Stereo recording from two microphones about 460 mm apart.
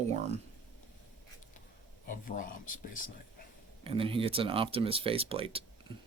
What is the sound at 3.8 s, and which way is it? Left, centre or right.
Speech, centre.